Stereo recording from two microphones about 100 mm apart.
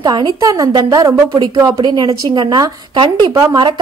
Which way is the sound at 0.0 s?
40° right (ahead or behind).